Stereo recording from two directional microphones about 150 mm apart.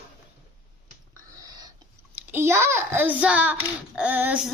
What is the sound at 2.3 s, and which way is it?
A child's voice, 15° right (ahead or behind).